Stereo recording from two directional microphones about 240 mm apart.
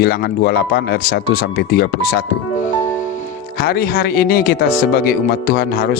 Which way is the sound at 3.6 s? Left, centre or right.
Left.